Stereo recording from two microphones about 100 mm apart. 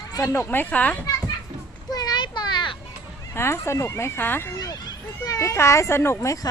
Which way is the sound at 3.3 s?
25° left (ahead or behind).